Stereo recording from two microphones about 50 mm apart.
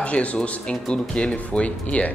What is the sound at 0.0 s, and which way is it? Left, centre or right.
Speech, left.